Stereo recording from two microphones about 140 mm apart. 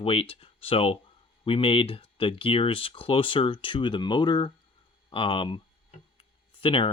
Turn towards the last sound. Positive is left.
turn(degrees=35)  # may be behind; listen again after turning